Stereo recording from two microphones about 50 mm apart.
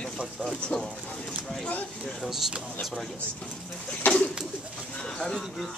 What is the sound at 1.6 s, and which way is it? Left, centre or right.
Speech, left.